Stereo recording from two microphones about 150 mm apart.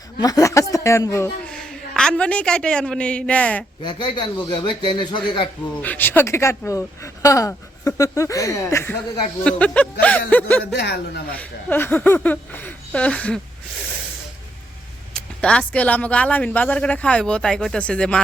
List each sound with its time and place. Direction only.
0.2 s speech: 25° left (ahead or behind)
1.5 s a woman's voice: 5° left (ahead or behind)
3.8 s speech: 30° left (ahead or behind)
5.8 s speech: 15° left (ahead or behind)
10.8 s a woman's voice: 90° left
11.3 s speech: 15° left (ahead or behind)
15.1 s speech: 5° left (ahead or behind)